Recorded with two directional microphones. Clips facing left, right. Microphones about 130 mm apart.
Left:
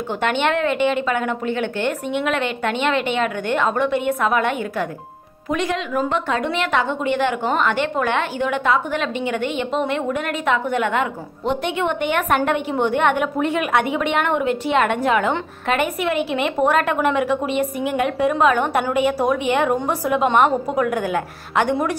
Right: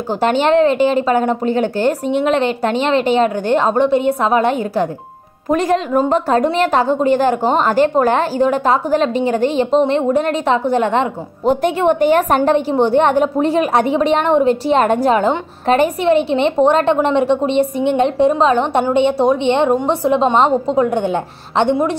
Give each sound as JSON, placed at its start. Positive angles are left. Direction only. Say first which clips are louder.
{"t": 0.2, "sound": "a woman's voice", "louder": "right 8 dB", "side_deg": -35}